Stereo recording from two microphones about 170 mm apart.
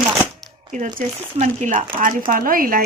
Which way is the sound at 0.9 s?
45° right (ahead or behind).